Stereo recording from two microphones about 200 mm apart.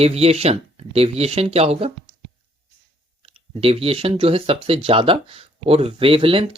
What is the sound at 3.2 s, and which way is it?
Speech, 30° right (ahead or behind).